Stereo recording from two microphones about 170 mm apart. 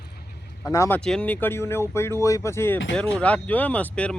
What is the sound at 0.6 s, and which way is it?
Speech, 20° left (ahead or behind).